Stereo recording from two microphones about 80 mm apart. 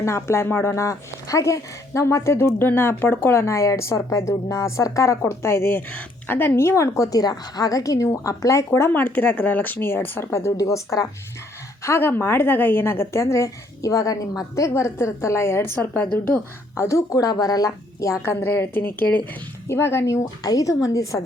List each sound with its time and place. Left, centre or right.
0.0 s speech: left
8.9 s speech: left
14.7 s speech: left
15.7 s speech: left
16.7 s a woman's voice: left
18.3 s speech: left
19.6 s speech: left
20.4 s a woman's voice: left